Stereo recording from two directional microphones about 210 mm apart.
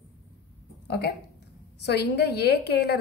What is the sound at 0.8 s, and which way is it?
A woman's voice, 50° left (ahead or behind).